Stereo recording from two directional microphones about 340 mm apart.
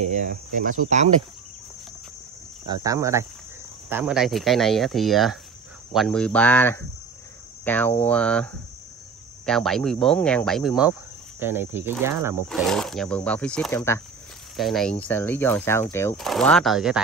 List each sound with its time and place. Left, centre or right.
0.0 s speech: right
2.6 s speech: centre
9.5 s speech: centre